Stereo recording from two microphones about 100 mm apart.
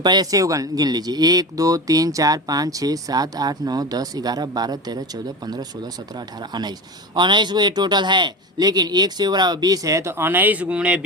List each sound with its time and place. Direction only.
0.0 s speech: 45° right (ahead or behind); by 11.0 s 10° right (ahead or behind)